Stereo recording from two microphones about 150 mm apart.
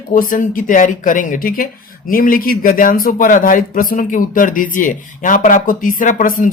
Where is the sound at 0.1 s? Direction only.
65° left (ahead or behind).